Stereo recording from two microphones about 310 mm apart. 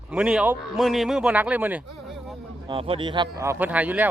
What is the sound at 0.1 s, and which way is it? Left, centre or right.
A man's voice, centre.